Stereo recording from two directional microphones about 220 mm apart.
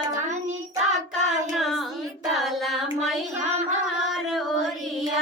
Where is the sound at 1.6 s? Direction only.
Centre (ahead or behind).